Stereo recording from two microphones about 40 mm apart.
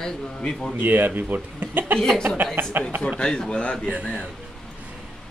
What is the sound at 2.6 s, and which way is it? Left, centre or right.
Speech, right.